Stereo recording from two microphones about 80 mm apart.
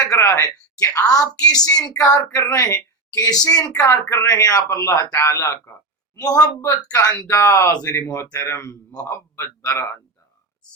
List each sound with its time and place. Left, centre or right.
0.0 s a woman's voice: left
6.1 s a woman's voice: left
6.6 s a man's voice: left